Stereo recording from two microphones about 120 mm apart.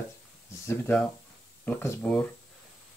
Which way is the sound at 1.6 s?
15° left (ahead or behind).